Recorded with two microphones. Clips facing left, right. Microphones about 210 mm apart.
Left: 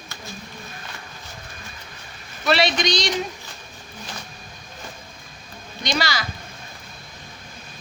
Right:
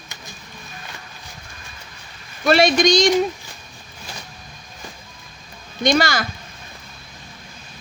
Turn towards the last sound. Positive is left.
turn(degrees=-50)  # may be behind; listen again after turning